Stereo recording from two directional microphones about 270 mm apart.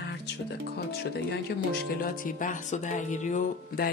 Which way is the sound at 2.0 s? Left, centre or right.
Left.